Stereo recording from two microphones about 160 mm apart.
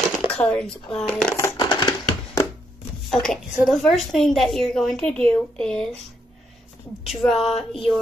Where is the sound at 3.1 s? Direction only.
5° left (ahead or behind).